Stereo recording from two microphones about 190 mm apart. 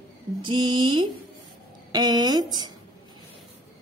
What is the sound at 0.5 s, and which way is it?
Speech, 25° right (ahead or behind).